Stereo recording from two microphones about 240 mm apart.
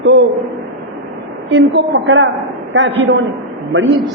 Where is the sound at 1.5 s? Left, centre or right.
Right.